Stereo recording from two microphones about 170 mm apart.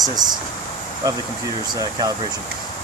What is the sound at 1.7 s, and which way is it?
Speech, 20° right (ahead or behind).